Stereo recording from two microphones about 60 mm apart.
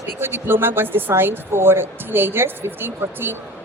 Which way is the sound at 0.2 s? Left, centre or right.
Right.